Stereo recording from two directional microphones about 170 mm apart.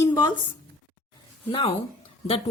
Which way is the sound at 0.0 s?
25° left (ahead or behind).